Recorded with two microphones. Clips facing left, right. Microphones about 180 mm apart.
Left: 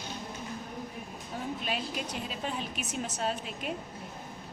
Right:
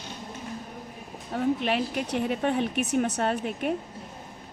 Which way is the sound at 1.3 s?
65° right (ahead or behind).